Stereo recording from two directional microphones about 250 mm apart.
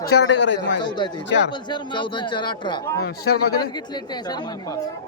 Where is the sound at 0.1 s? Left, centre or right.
Left.